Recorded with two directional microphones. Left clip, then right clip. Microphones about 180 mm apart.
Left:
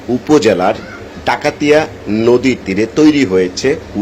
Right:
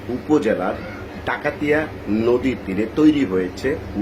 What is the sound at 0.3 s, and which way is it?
Speech, 20° left (ahead or behind).